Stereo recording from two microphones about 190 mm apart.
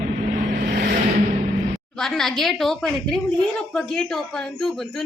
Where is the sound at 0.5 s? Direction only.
50° right (ahead or behind).